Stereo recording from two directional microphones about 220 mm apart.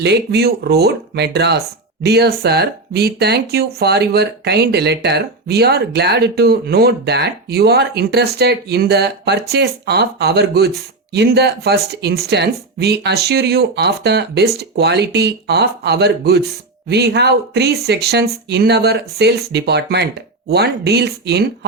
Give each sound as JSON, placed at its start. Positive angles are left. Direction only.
{"t": 0.0, "sound": "speech", "side_deg": -50}